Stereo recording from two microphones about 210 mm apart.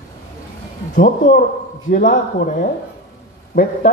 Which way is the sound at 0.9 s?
40° left (ahead or behind).